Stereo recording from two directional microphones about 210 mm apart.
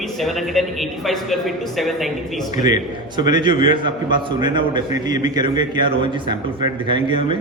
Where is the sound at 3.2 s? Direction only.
20° right (ahead or behind).